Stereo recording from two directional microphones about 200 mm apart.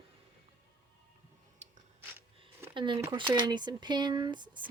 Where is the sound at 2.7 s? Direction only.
25° right (ahead or behind).